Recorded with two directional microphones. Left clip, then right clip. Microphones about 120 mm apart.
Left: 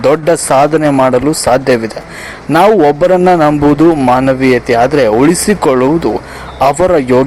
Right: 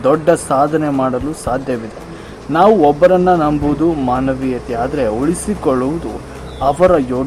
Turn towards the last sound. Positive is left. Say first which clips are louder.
# left 4 dB
turn(degrees=35)  # may be behind; listen again after turning